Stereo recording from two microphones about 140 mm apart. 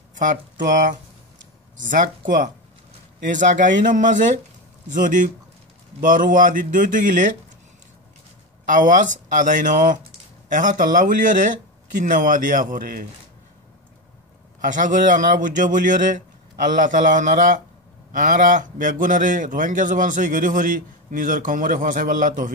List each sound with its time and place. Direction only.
0.2 s a man's voice: 65° right (ahead or behind)
8.6 s a man's voice: 65° right (ahead or behind)
14.6 s a man's voice: 65° right (ahead or behind)